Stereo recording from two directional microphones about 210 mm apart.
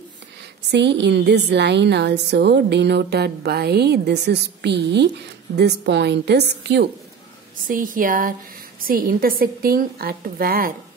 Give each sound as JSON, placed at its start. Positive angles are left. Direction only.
{"t": 0.7, "sound": "a woman's voice", "side_deg": -55}
{"t": 7.6, "sound": "a woman's voice", "side_deg": -40}